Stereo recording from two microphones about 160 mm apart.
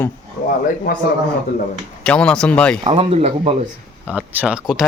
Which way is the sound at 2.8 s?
40° right (ahead or behind).